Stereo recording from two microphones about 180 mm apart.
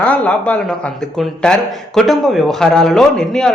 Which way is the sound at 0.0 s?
5° left (ahead or behind).